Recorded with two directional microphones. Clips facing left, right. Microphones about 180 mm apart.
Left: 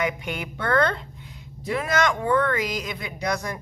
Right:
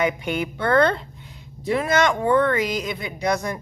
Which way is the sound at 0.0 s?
30° right (ahead or behind).